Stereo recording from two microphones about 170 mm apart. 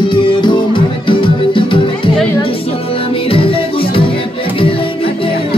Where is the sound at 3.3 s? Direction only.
30° left (ahead or behind).